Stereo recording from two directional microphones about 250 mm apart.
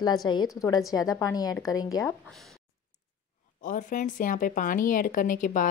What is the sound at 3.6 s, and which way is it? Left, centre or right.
A woman's voice, left.